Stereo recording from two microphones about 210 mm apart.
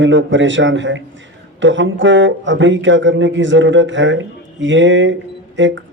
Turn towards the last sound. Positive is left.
turn(degrees=-60)  # may be behind; listen again after turning